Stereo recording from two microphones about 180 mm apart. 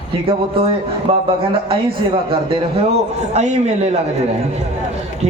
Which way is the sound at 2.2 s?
30° right (ahead or behind).